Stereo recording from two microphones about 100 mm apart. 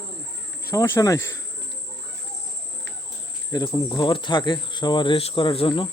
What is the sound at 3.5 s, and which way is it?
Speech, 45° left (ahead or behind).